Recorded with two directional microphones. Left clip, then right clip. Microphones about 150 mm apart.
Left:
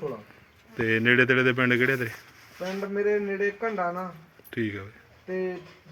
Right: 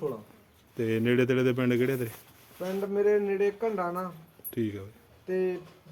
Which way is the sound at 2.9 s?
50° right (ahead or behind).